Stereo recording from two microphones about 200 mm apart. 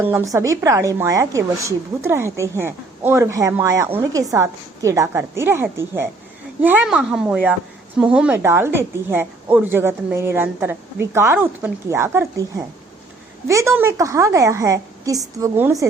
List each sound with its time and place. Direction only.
0.0 s a woman's voice: 10° right (ahead or behind)